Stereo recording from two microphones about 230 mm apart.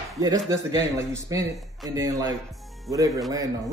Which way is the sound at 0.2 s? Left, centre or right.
Centre.